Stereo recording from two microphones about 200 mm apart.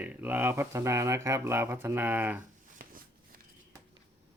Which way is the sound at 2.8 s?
45° right (ahead or behind).